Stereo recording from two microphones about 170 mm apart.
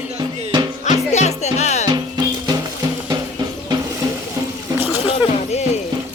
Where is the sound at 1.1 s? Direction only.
40° left (ahead or behind).